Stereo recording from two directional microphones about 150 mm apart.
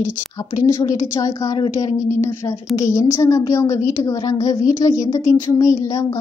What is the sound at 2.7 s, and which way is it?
A woman's voice, 20° left (ahead or behind).